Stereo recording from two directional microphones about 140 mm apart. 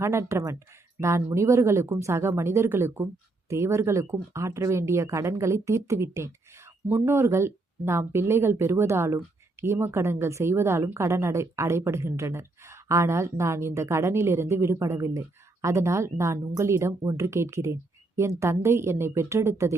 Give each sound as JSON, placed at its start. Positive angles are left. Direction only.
{"t": 0.0, "sound": "a woman's voice", "side_deg": -20}